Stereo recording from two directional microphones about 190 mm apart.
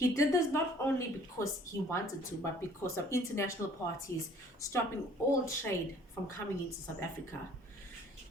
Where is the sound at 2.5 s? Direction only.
15° left (ahead or behind).